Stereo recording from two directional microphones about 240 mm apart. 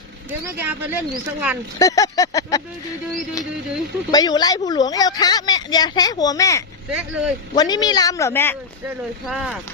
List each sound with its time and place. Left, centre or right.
0.4 s speech: centre
1.8 s speech: centre
4.1 s speech: centre
6.9 s speech: centre
7.5 s speech: centre
8.9 s speech: centre